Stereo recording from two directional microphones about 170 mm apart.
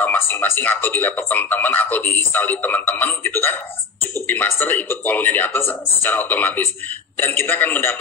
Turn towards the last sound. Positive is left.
turn(degrees=10)  # may be behind; listen again after turning